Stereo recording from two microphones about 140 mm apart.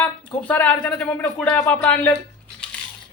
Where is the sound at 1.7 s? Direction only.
10° left (ahead or behind).